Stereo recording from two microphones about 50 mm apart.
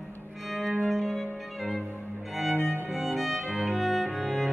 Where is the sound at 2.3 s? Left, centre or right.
Centre.